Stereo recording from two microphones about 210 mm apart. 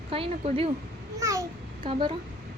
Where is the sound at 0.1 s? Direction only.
25° right (ahead or behind).